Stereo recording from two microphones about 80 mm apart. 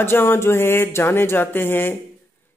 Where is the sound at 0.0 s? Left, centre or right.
Left.